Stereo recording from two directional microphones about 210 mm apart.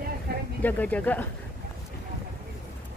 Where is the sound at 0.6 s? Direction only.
5° left (ahead or behind).